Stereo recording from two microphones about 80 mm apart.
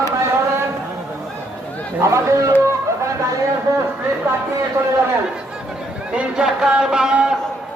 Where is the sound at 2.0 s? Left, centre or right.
Right.